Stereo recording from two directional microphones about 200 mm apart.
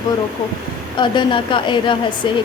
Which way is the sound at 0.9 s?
25° left (ahead or behind).